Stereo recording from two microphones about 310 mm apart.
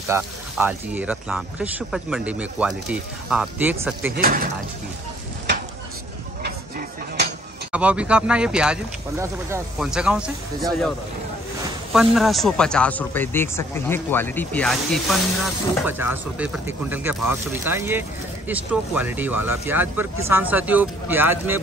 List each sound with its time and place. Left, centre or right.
0.1 s speech: centre
4.1 s speech: right
7.7 s speech: centre
11.9 s speech: centre